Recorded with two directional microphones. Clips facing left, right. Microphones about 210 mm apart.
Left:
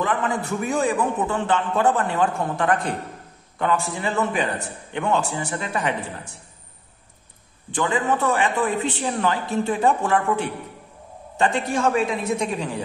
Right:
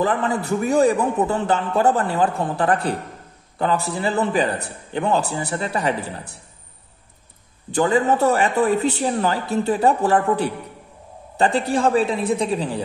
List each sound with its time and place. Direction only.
0.0 s a man's voice: 35° right (ahead or behind)
7.7 s a man's voice: 40° right (ahead or behind)